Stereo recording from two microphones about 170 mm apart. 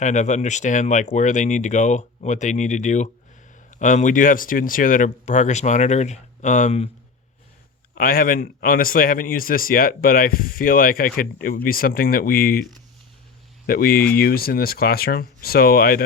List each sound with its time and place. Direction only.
0.0 s speech: 45° left (ahead or behind)
7.9 s speech: 60° left (ahead or behind)
13.7 s speech: 60° left (ahead or behind)